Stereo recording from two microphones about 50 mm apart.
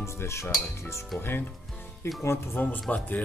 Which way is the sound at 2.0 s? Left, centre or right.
Left.